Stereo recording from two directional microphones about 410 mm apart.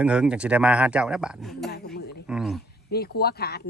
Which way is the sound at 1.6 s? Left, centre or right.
Left.